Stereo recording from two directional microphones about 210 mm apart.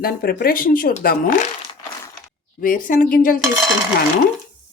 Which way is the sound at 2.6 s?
40° left (ahead or behind).